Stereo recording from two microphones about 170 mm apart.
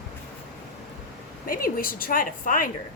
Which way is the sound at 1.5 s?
55° left (ahead or behind).